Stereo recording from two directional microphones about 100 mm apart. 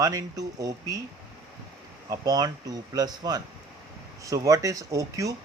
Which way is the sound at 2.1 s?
40° right (ahead or behind).